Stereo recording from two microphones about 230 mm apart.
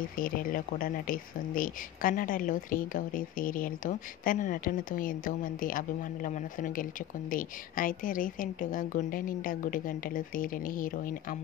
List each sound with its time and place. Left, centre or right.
0.2 s speech: left